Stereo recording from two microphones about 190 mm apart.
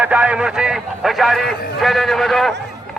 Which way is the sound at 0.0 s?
5° right (ahead or behind).